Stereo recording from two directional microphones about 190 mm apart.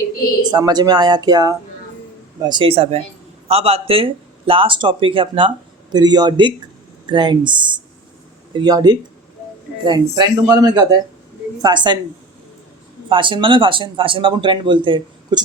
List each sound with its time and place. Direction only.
0.5 s speech: 20° right (ahead or behind)
13.1 s speech: 25° right (ahead or behind)